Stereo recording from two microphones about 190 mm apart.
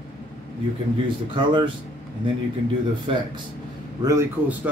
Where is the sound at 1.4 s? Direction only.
25° right (ahead or behind).